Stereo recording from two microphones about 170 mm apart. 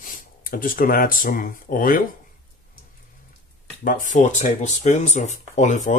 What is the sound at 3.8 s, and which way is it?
Speech, 50° left (ahead or behind).